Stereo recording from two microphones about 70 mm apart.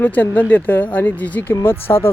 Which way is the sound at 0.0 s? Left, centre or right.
Left.